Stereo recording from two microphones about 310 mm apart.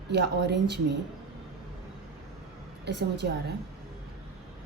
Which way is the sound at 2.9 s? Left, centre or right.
Right.